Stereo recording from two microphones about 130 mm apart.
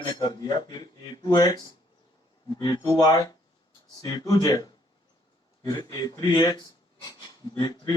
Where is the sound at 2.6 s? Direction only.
30° left (ahead or behind).